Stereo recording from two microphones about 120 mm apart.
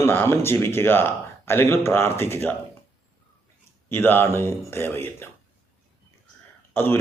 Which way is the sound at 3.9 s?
15° left (ahead or behind).